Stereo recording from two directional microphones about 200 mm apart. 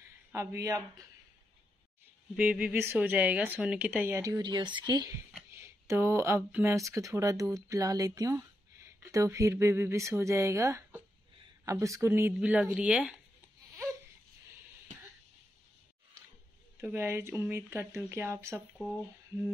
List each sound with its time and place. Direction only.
0.3 s speech: 15° right (ahead or behind)
2.3 s speech: 5° right (ahead or behind)
16.8 s speech: 10° right (ahead or behind)